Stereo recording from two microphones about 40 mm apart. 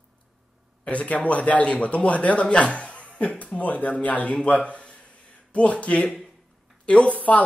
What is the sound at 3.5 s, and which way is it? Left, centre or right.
Speech, left.